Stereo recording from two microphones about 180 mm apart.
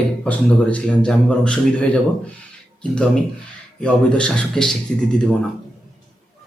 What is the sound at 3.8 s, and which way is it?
Speech, 5° left (ahead or behind).